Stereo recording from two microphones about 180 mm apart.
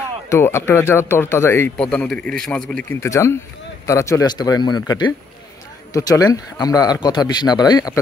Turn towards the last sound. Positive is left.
turn(degrees=20)  # may be behind; listen again after turning